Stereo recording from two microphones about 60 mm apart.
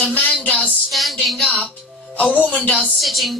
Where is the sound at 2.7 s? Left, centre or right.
Centre.